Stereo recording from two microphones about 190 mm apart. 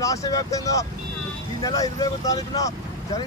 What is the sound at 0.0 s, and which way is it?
Speech, 15° left (ahead or behind).